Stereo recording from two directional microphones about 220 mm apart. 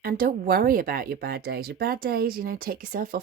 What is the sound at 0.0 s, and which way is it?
Speech, 40° right (ahead or behind).